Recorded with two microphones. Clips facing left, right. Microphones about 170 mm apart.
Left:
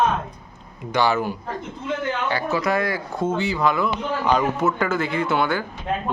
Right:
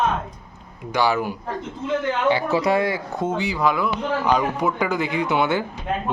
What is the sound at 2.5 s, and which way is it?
Speech, 30° right (ahead or behind).